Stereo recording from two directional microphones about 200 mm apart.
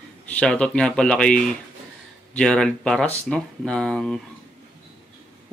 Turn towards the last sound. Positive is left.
turn(degrees=5)  # may be behind; listen again after turning